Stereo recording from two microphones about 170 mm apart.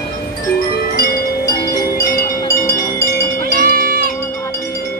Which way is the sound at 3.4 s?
60° right (ahead or behind).